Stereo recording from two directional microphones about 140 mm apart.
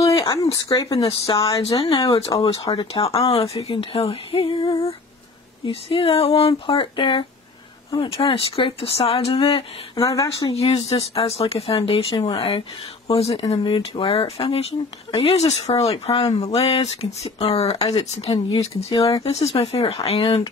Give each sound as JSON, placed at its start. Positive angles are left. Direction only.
{"t": 0.3, "sound": "speech", "side_deg": 25}
{"t": 1.0, "sound": "speech", "side_deg": 40}
{"t": 1.8, "sound": "speech", "side_deg": 25}
{"t": 2.1, "sound": "speech", "side_deg": 45}
{"t": 5.7, "sound": "female singing", "side_deg": 40}
{"t": 8.0, "sound": "speech", "side_deg": 40}
{"t": 9.9, "sound": "speech", "side_deg": 25}
{"t": 10.5, "sound": "speech", "side_deg": 45}